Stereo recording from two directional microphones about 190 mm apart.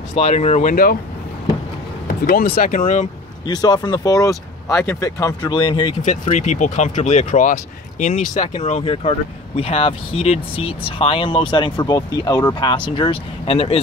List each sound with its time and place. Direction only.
0.1 s speech: 35° left (ahead or behind)
2.0 s speech: 50° left (ahead or behind)
3.4 s speech: 20° left (ahead or behind)
6.3 s speech: 40° left (ahead or behind)